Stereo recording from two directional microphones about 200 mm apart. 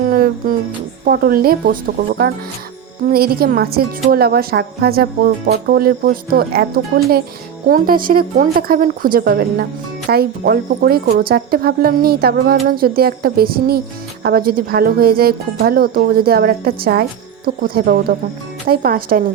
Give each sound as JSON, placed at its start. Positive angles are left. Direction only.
{"t": 0.1, "sound": "music", "side_deg": -45}
{"t": 1.0, "sound": "speech", "side_deg": -50}